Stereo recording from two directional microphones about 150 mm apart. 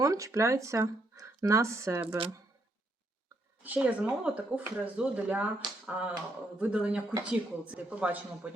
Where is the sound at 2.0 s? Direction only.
35° right (ahead or behind).